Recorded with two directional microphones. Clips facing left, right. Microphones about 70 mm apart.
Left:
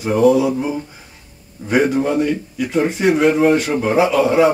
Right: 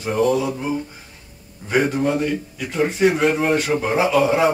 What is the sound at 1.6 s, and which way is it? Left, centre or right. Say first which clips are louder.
A man's voice: left 3 dB; centre.